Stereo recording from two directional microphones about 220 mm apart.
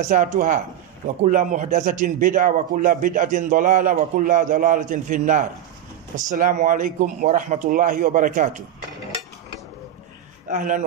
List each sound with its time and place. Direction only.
0.0 s a man's voice: 35° right (ahead or behind)
10.5 s a man's voice: 35° right (ahead or behind)